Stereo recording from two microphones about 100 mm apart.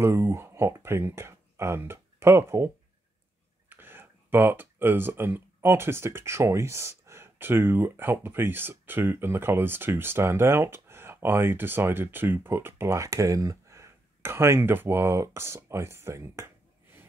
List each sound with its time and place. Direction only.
0.0 s speech: 30° right (ahead or behind)